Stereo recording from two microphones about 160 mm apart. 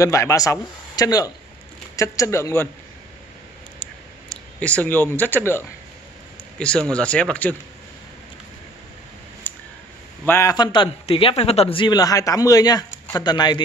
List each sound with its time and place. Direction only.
0.0 s a man's voice: 20° left (ahead or behind)
3.8 s a sound: 10° left (ahead or behind)
6.6 s speech: 5° left (ahead or behind)
9.5 s a sound: 10° left (ahead or behind)
10.2 s speech: 15° left (ahead or behind)
10.5 s a man's voice: 25° left (ahead or behind)